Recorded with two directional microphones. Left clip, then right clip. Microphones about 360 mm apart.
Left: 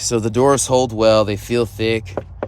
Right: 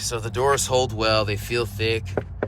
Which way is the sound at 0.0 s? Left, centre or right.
Left.